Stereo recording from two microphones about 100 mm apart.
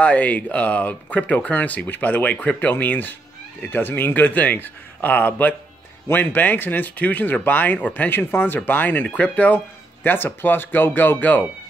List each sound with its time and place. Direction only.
0.0 s speech: 15° left (ahead or behind)